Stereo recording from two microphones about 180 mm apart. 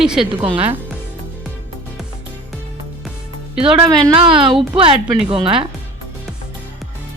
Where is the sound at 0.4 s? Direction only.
30° right (ahead or behind).